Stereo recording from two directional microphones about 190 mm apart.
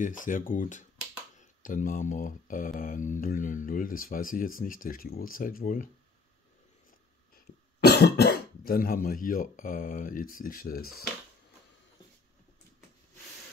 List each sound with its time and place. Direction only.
0.0 s speech: 45° left (ahead or behind)
7.8 s speech: 55° left (ahead or behind)